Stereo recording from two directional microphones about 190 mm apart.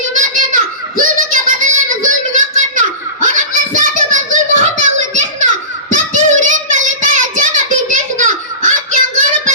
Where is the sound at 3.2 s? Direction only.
40° right (ahead or behind).